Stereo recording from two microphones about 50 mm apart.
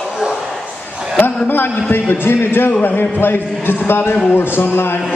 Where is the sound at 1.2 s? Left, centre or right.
Left.